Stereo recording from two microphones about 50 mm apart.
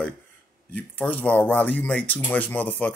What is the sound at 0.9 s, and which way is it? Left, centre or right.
Speech, left.